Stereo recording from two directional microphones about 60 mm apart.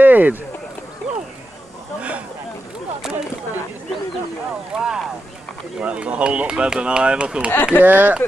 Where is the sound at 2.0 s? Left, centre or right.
Right.